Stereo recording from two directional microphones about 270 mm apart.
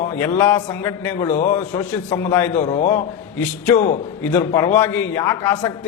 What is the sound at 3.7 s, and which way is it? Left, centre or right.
Speech, left.